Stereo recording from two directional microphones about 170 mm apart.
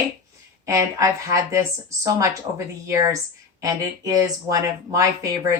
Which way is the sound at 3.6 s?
20° right (ahead or behind).